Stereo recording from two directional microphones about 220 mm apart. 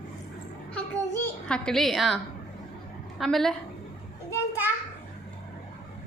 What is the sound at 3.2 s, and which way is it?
Speech, centre (ahead or behind).